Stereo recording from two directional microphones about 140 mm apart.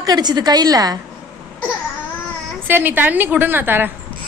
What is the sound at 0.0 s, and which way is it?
Speech, 30° right (ahead or behind).